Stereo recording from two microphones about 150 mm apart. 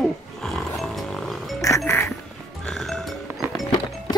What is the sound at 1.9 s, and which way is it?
Music, 20° left (ahead or behind).